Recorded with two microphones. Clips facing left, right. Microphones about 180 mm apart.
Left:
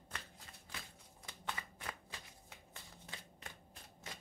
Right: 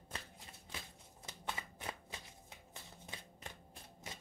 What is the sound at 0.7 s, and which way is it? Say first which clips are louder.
Shuffling cards: right 2 dB; 25° right (ahead or behind).